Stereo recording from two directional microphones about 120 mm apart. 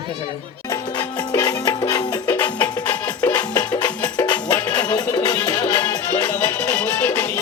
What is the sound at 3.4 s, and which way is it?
Music, 35° left (ahead or behind).